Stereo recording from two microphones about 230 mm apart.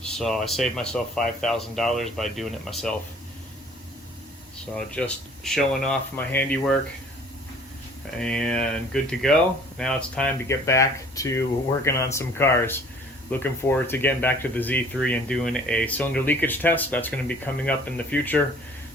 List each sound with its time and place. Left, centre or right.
0.0 s speech: centre
4.9 s speech: centre
8.2 s speech: centre